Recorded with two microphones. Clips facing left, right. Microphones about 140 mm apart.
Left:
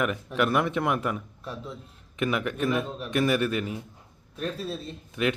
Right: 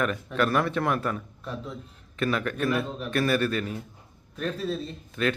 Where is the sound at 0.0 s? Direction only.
15° left (ahead or behind).